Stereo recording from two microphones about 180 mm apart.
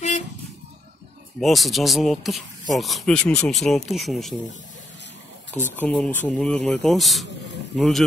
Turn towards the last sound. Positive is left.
turn(degrees=5)  # may be behind; listen again after turning